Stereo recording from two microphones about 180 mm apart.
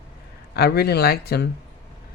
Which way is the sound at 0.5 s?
60° left (ahead or behind).